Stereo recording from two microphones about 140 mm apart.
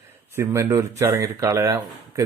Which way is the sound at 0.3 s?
20° right (ahead or behind).